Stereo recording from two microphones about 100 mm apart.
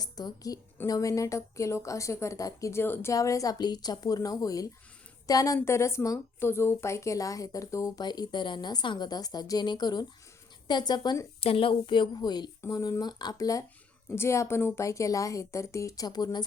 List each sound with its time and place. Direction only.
0.0 s a woman's voice: 40° left (ahead or behind); by 3.1 s 25° left (ahead or behind)
3.1 s a woman's voice: 35° left (ahead or behind)
8.0 s speech: 45° left (ahead or behind)
11.3 s a woman's voice: 70° left (ahead or behind); by 16.4 s 45° left (ahead or behind)